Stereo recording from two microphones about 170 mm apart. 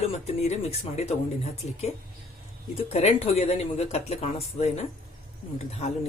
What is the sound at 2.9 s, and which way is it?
Speech, 35° left (ahead or behind).